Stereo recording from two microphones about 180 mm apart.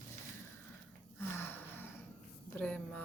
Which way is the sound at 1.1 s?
10° left (ahead or behind).